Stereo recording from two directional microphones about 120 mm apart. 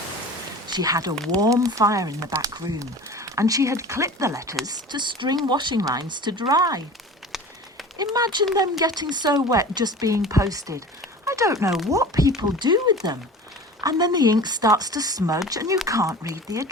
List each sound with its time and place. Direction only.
0.7 s speech: 30° right (ahead or behind)
7.3 s a sound: centre (ahead or behind)
7.9 s speech: 35° right (ahead or behind)